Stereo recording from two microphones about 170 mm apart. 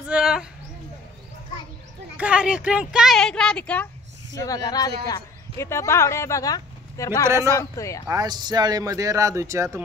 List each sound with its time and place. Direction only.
0.0 s a sound: 5° right (ahead or behind)
2.1 s speech: 5° right (ahead or behind)
4.4 s a man's voice: 20° left (ahead or behind)
8.1 s a man's voice: 25° right (ahead or behind)